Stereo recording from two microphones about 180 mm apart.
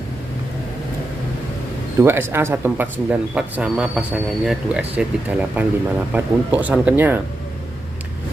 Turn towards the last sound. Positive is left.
turn(degrees=-10)  # may be behind; listen again after turning